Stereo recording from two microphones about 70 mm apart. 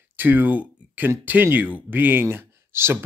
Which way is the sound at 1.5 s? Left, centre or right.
Right.